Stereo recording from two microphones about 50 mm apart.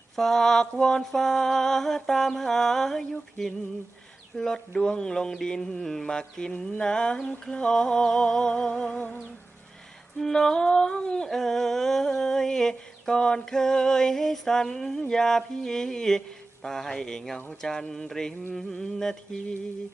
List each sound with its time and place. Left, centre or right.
0.2 s mantra: centre
6.7 s a sound: centre
7.5 s mantra: centre
10.2 s mantra: centre
11.3 s mantra: centre